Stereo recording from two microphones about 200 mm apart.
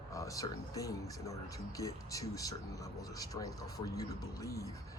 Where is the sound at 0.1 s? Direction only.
15° left (ahead or behind).